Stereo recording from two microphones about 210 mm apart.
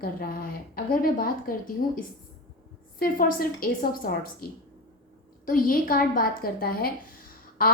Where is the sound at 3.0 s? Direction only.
45° left (ahead or behind).